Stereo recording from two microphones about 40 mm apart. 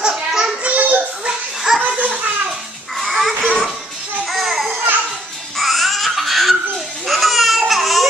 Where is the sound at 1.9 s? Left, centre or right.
Right.